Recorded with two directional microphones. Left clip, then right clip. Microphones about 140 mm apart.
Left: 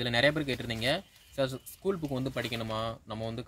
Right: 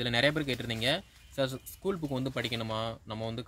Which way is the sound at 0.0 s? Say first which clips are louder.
Left 1 dB; 5° left (ahead or behind).